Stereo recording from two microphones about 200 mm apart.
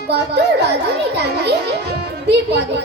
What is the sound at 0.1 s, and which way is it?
A child's voice, 55° right (ahead or behind).